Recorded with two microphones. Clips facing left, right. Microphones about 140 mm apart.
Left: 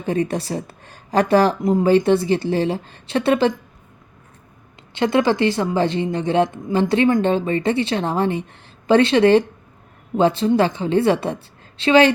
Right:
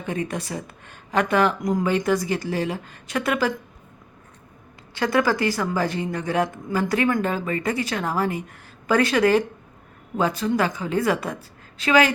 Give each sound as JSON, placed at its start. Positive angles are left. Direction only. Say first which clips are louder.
{"t": 0.0, "sound": "speech", "louder": "left 6 dB", "side_deg": 35}
{"t": 4.9, "sound": "a woman's voice", "louder": "left 4 dB", "side_deg": 25}